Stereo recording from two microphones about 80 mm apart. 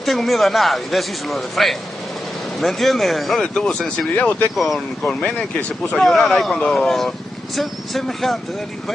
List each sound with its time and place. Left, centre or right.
0.0 s a man's voice: centre
4.1 s speech: centre
4.6 s a man's voice: centre
5.0 s a man's voice: centre